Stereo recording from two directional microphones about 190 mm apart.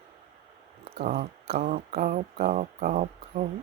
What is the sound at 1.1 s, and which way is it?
Speech, 60° right (ahead or behind).